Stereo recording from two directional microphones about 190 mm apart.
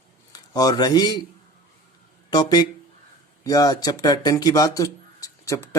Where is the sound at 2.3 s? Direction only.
20° left (ahead or behind).